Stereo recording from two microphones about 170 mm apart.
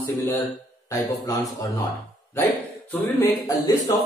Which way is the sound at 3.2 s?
20° left (ahead or behind).